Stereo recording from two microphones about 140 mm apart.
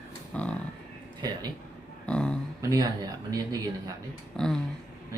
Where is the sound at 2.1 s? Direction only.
5° left (ahead or behind).